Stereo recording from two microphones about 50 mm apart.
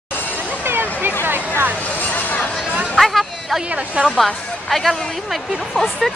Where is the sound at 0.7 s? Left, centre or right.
Right.